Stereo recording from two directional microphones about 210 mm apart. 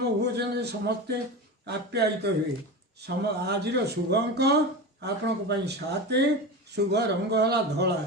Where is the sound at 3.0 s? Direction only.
50° right (ahead or behind).